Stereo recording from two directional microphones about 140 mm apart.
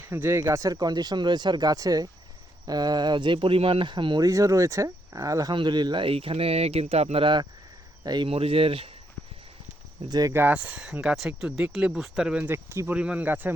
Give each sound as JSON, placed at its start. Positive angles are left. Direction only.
{"t": 0.0, "sound": "speech", "side_deg": -15}
{"t": 4.3, "sound": "speech", "side_deg": -25}
{"t": 8.3, "sound": "speech", "side_deg": -45}
{"t": 10.1, "sound": "speech", "side_deg": -25}